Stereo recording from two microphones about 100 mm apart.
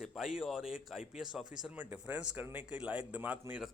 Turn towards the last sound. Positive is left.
turn(degrees=-20)  # may be behind; listen again after turning